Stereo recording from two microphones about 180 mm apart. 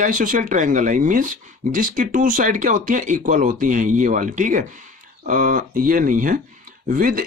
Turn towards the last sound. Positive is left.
turn(degrees=-50)  # may be behind; listen again after turning